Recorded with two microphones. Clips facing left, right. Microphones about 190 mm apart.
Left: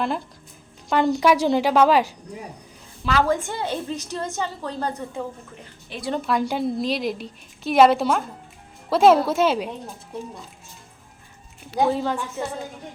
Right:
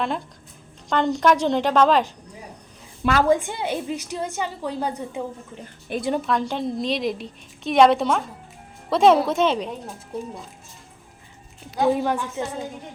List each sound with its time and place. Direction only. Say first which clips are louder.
0.9 s a woman's voice: left 1 dB; 10° left (ahead or behind)
3.0 s a woman's voice: right 1 dB; 50° right (ahead or behind)
3.2 s a woman's voice: right 3 dB; 15° right (ahead or behind)
5.9 s speech: right 8 dB; 55° right (ahead or behind)
6.2 s a woman's voice: left 1 dB; 10° left (ahead or behind)
11.9 s a woman's voice: right 2 dB; 15° right (ahead or behind)